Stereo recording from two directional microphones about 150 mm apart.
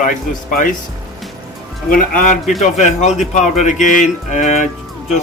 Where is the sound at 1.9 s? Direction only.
65° left (ahead or behind).